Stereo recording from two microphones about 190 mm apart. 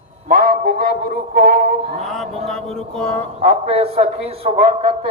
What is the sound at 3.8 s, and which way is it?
Speech, 30° right (ahead or behind).